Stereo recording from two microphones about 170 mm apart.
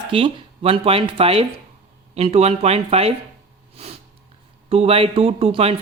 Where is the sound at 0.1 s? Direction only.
30° right (ahead or behind).